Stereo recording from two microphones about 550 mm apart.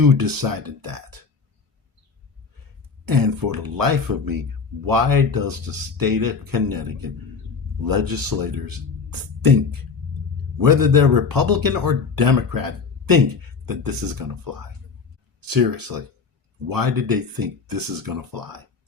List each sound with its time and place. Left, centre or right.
0.0 s speech: right
3.1 s speech: right
10.6 s speech: right